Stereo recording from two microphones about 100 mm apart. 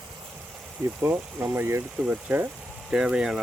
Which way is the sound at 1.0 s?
20° right (ahead or behind).